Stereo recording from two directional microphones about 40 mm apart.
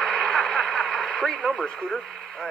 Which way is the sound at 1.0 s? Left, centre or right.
Left.